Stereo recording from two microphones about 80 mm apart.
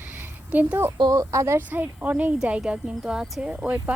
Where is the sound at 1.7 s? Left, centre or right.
Right.